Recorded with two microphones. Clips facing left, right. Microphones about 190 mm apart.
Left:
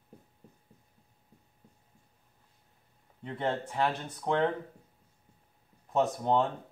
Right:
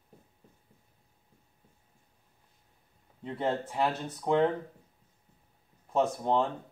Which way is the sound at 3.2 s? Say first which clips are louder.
Right 1 dB; 5° right (ahead or behind).